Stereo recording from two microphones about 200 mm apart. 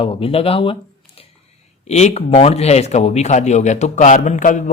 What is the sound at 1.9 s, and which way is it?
A man's voice, 35° left (ahead or behind).